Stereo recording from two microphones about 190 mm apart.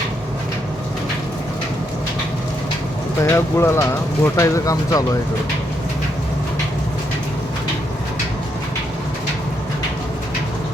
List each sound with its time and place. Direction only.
3.2 s speech: 15° left (ahead or behind)